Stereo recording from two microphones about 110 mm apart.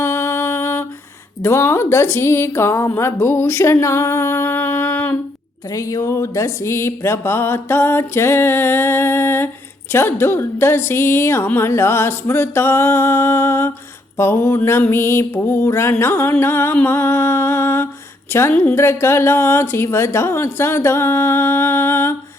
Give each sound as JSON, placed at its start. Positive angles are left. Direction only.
{"t": 0.0, "sound": "music", "side_deg": 25}
{"t": 1.4, "sound": "a woman's voice", "side_deg": 25}
{"t": 5.7, "sound": "music", "side_deg": 30}
{"t": 9.9, "sound": "a woman's voice", "side_deg": 20}